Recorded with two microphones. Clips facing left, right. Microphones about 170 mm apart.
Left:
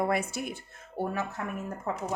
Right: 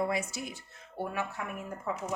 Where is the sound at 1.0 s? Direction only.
40° left (ahead or behind).